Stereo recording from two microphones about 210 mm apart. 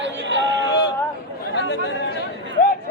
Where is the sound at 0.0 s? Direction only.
60° right (ahead or behind).